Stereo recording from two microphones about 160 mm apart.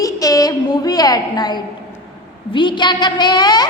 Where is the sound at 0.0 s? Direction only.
20° left (ahead or behind).